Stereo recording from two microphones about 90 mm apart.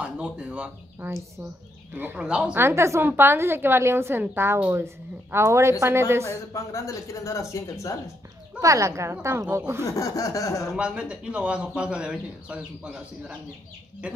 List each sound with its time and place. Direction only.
0.0 s speech: 10° right (ahead or behind)
2.0 s speech: 15° right (ahead or behind)
2.5 s a woman's voice: 30° right (ahead or behind)
6.5 s speech: 35° left (ahead or behind)
8.5 s a woman's voice: 35° right (ahead or behind)
9.8 s speech: 35° left (ahead or behind)
10.8 s speech: 10° right (ahead or behind)